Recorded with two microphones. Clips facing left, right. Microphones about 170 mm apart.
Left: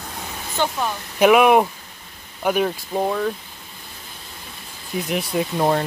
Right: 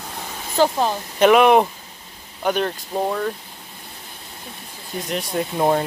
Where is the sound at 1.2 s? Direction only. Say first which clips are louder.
Even; 5° left (ahead or behind).